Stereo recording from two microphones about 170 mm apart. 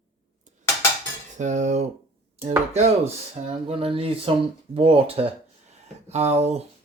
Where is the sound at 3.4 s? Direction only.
40° right (ahead or behind).